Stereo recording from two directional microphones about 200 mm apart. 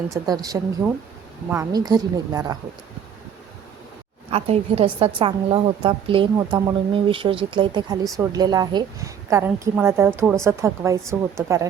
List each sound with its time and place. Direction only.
0.1 s a woman's voice: 15° right (ahead or behind)
0.8 s speech: 5° right (ahead or behind)
1.5 s a woman's voice: 15° right (ahead or behind)
4.3 s a woman's voice: 30° right (ahead or behind)